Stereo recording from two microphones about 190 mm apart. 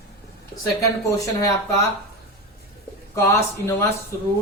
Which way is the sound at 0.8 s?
15° left (ahead or behind).